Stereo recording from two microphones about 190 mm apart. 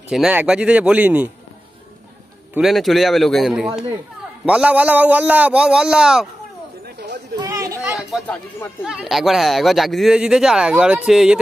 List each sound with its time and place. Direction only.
0.1 s speech: 5° right (ahead or behind)
2.5 s speech: centre (ahead or behind)
7.3 s chatter: 20° right (ahead or behind)
7.9 s chatter: 5° right (ahead or behind)
8.8 s speech: centre (ahead or behind)